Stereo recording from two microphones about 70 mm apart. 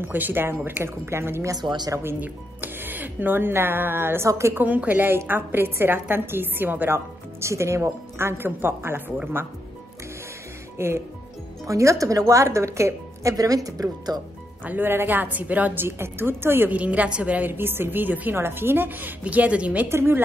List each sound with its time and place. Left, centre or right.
0.0 s speech: right
1.5 s speech: right
2.0 s speech: right
4.3 s speech: right
4.6 s a woman's voice: right
7.3 s speech: right
10.8 s speech: right
11.6 s a woman's voice: right
14.6 s a woman's voice: right
16.7 s a woman's voice: right
17.5 s a woman's voice: right
19.9 s speech: right